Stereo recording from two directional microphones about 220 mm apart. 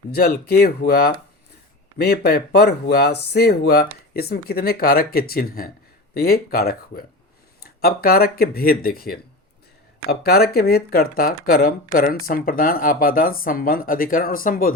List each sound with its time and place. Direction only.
0.1 s speech: 45° left (ahead or behind)